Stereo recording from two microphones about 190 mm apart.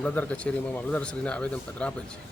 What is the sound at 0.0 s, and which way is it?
Speech, 5° left (ahead or behind).